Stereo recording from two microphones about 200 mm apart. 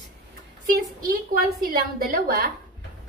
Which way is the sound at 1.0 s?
45° right (ahead or behind).